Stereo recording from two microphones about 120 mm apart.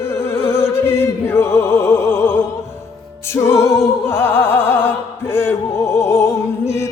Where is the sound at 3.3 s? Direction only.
20° left (ahead or behind).